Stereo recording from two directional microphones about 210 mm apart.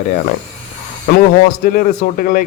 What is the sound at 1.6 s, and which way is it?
Speech, 40° left (ahead or behind).